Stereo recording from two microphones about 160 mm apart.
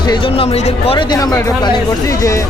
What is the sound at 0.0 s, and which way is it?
Speech, 30° left (ahead or behind).